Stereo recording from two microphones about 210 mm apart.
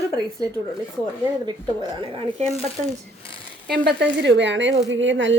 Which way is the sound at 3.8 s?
55° right (ahead or behind).